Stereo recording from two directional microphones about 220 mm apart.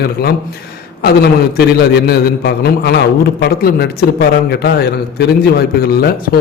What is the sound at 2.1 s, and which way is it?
A man's voice, 45° left (ahead or behind).